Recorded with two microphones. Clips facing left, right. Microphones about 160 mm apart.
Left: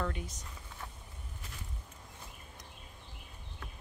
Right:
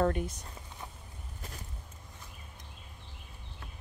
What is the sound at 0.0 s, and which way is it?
Speech, 50° right (ahead or behind).